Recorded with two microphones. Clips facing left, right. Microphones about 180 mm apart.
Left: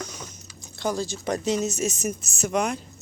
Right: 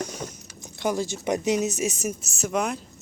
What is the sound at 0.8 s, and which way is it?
Speech, 20° right (ahead or behind).